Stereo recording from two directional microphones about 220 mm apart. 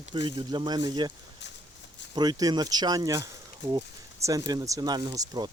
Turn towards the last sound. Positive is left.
turn(degrees=-20)  # may be behind; listen again after turning